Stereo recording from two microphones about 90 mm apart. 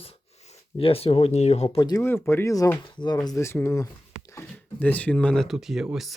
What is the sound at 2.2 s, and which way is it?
Speech, 30° left (ahead or behind).